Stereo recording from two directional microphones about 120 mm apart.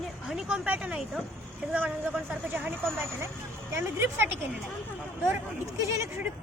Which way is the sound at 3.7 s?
20° right (ahead or behind).